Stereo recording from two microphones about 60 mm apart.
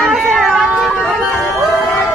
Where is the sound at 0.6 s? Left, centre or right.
Centre.